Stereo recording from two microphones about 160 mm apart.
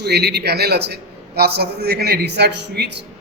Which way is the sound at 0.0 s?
90° right.